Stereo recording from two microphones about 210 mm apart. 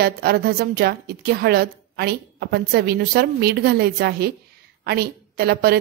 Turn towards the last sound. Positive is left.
turn(degrees=-50)  # may be behind; listen again after turning